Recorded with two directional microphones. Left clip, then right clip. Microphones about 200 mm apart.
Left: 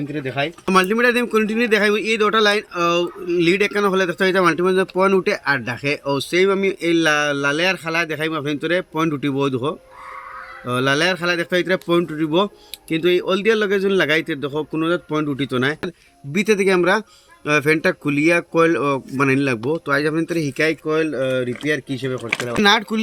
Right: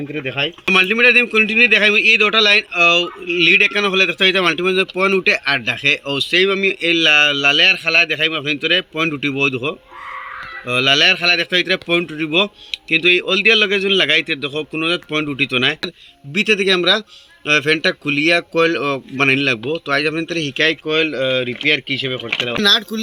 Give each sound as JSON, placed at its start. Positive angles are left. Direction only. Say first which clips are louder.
{"t": 0.1, "sound": "speech", "louder": "right 4 dB", "side_deg": 40}
{"t": 16.3, "sound": "speech", "louder": "right 2 dB", "side_deg": 25}
{"t": 17.4, "sound": "speech", "louder": "right 2 dB", "side_deg": 50}
{"t": 22.1, "sound": "speech", "louder": "right 2 dB", "side_deg": 20}
{"t": 22.6, "sound": "speech", "louder": "right 1 dB", "side_deg": 50}